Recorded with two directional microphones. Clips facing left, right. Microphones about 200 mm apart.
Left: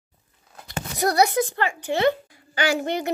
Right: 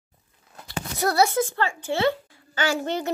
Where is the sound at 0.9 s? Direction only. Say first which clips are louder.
Left 1 dB; 15° left (ahead or behind).